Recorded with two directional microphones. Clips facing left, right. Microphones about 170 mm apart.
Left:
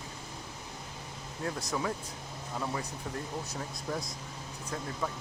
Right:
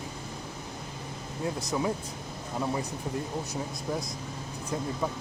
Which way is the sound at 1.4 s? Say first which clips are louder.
Right 4 dB; 15° right (ahead or behind).